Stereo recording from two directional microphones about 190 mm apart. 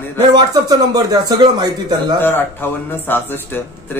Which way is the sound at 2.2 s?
10° left (ahead or behind).